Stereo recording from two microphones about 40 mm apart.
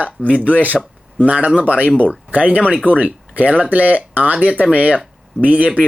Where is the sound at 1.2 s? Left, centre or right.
Right.